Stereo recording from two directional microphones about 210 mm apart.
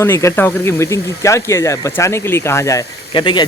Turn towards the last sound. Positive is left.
turn(degrees=20)  # may be behind; listen again after turning